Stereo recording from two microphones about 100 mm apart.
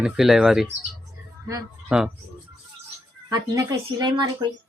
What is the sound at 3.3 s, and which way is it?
Speech, 40° right (ahead or behind).